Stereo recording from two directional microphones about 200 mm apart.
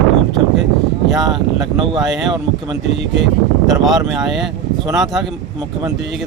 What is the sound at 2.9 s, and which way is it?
Speech, 60° right (ahead or behind).